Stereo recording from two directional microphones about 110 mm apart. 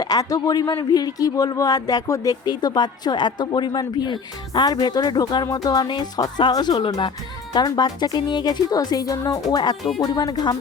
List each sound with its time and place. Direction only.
0.0 s speech: 35° left (ahead or behind)